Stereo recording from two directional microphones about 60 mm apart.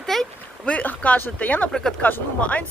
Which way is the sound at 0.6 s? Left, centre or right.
Left.